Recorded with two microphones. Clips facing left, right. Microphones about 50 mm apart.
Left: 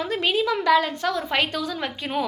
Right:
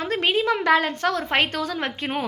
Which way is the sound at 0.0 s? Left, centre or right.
Right.